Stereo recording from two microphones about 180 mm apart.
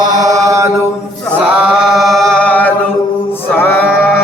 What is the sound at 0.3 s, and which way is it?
Mantra, 15° right (ahead or behind).